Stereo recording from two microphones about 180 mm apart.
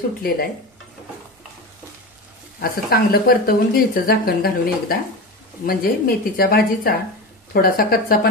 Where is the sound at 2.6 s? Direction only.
55° left (ahead or behind).